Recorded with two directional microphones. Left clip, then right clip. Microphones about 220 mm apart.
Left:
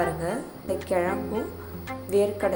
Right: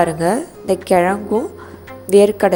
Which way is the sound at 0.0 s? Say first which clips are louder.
Right 11 dB; 40° right (ahead or behind).